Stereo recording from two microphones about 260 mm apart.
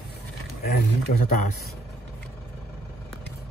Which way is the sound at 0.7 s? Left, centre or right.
Left.